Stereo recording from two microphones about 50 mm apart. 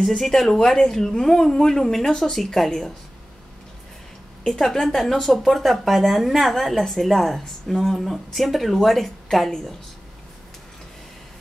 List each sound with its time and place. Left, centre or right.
0.0 s speech: centre
4.5 s speech: centre